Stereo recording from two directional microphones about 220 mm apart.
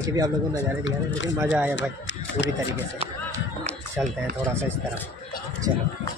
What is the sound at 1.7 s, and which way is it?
Speech, 55° left (ahead or behind).